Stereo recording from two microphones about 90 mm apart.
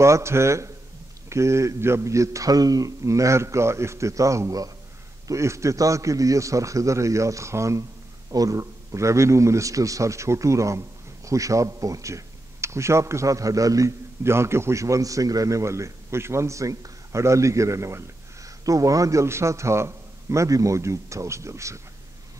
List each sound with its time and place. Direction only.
0.0 s a man's voice: 30° right (ahead or behind)